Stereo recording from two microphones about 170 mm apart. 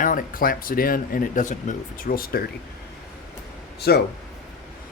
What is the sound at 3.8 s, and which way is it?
Speech, 70° left (ahead or behind).